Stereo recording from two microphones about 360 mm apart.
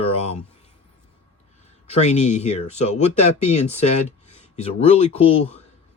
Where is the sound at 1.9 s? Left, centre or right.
Centre.